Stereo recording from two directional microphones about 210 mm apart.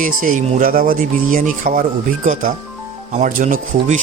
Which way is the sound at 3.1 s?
40° right (ahead or behind).